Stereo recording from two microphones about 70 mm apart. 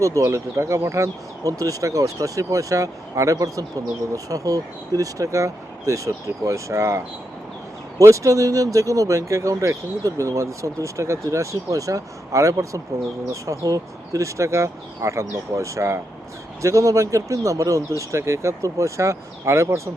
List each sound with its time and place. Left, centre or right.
0.0 s speech: right